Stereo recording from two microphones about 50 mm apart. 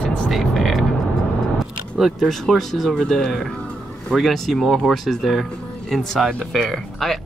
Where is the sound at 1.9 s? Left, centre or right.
Centre.